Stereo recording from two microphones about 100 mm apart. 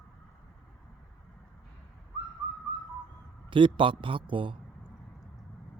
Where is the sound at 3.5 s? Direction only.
55° right (ahead or behind).